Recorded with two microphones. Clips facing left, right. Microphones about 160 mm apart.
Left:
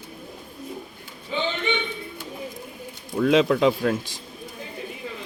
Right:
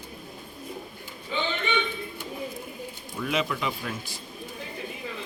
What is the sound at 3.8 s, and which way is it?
Speech, 65° left (ahead or behind).